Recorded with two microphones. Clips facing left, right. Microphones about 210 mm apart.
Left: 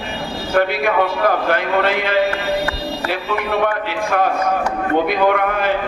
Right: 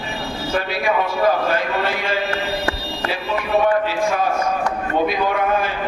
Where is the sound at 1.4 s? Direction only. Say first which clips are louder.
Left 3 dB; 60° left (ahead or behind).